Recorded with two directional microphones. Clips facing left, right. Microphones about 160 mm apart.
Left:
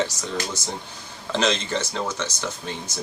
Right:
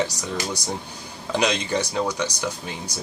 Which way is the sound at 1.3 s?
15° right (ahead or behind).